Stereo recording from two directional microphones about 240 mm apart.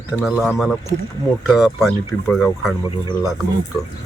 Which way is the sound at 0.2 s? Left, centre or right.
Centre.